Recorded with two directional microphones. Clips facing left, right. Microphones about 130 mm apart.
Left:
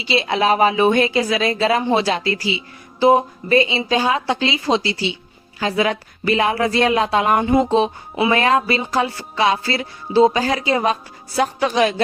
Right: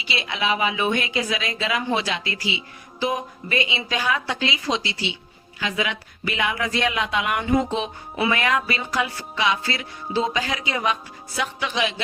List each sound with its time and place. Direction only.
0.0 s speech: 30° left (ahead or behind)